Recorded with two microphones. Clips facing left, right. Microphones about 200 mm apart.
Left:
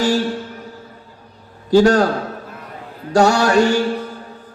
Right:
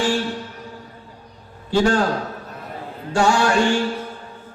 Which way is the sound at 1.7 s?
40° left (ahead or behind).